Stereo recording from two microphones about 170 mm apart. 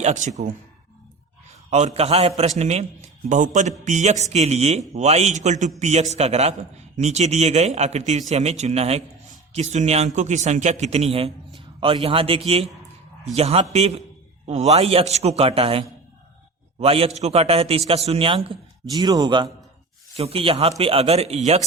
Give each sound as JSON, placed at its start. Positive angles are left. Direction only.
{"t": 0.0, "sound": "speech", "side_deg": -45}
{"t": 1.7, "sound": "a man's voice", "side_deg": -40}